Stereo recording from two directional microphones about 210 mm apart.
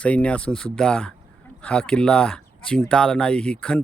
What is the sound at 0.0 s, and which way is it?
Speech, 5° left (ahead or behind).